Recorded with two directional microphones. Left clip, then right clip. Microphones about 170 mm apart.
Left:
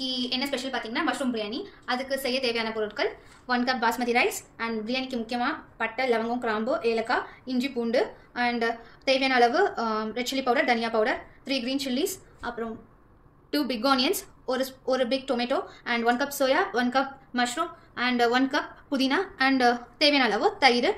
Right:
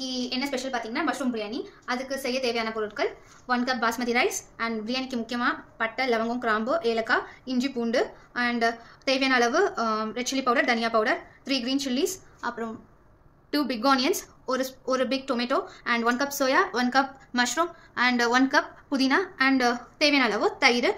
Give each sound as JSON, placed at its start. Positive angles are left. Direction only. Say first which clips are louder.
{"t": 0.0, "sound": "a woman's voice", "louder": "left 1 dB", "side_deg": -15}